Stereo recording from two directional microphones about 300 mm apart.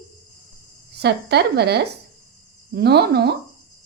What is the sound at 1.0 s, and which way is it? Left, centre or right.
A woman's voice, right.